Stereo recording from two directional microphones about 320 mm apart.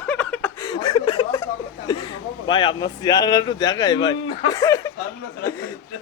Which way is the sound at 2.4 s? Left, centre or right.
Centre.